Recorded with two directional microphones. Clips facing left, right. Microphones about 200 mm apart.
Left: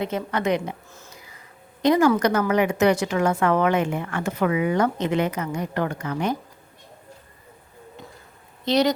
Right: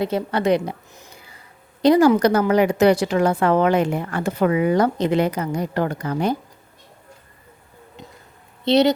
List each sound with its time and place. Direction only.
0.0 s a woman's voice: 35° right (ahead or behind)
0.9 s a sound: 15° right (ahead or behind)
1.8 s a woman's voice: 35° right (ahead or behind)
8.6 s speech: 25° right (ahead or behind)